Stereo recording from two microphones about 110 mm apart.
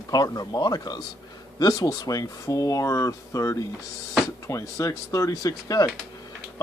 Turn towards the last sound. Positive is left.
turn(degrees=30)  # may be behind; listen again after turning